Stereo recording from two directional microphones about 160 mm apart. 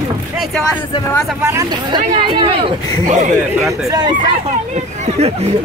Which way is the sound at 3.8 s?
25° right (ahead or behind).